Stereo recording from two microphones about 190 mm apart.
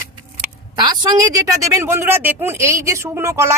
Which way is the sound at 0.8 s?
20° right (ahead or behind).